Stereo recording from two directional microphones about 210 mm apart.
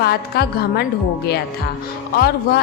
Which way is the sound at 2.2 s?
50° left (ahead or behind).